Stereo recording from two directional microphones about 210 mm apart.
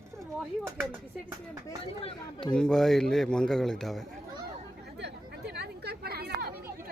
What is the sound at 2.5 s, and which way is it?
A man's voice, centre (ahead or behind).